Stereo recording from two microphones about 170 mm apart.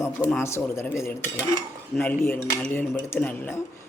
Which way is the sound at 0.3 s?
15° left (ahead or behind).